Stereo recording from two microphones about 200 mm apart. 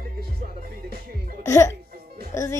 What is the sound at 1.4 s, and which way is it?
Speech, 15° left (ahead or behind).